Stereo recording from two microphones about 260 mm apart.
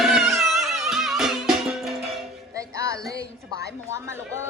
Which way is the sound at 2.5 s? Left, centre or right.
Centre.